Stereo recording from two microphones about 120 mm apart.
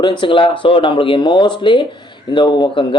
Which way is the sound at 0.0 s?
40° left (ahead or behind).